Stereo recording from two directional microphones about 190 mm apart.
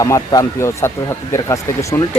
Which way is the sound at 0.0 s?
15° left (ahead or behind).